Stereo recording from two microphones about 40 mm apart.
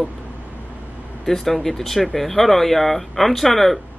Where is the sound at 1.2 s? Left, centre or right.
Centre.